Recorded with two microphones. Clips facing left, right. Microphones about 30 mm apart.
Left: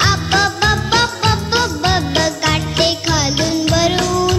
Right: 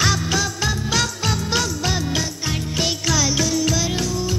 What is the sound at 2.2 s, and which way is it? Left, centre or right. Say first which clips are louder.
Jingle: left 10 dB; left.